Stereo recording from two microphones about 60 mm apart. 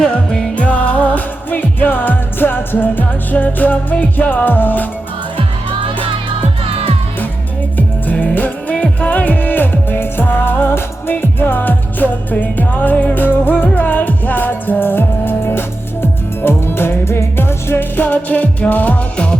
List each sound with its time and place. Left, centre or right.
0.5 s music: left
8.7 s music: left